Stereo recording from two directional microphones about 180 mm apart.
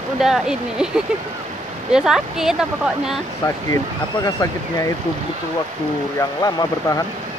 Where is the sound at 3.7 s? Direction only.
20° left (ahead or behind).